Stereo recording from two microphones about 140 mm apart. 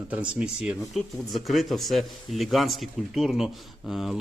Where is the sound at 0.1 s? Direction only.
10° right (ahead or behind).